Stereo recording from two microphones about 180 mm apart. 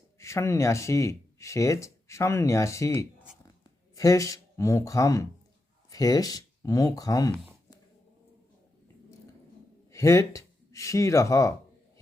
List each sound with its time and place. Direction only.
0.2 s speech: 15° left (ahead or behind)
9.9 s speech: 15° left (ahead or behind)